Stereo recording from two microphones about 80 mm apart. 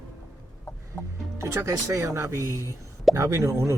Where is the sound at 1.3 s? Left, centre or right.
Right.